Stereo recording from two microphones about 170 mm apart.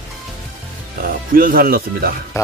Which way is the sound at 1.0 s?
55° right (ahead or behind).